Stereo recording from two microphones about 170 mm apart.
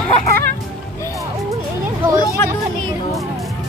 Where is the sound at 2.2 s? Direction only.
20° left (ahead or behind).